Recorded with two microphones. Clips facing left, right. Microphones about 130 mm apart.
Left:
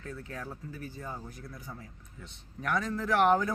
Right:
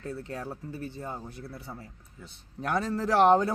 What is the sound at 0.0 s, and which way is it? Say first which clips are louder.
Speech: right 5 dB; 30° right (ahead or behind).